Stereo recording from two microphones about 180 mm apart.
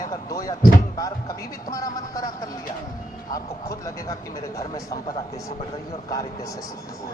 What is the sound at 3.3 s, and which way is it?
Speech, 20° left (ahead or behind).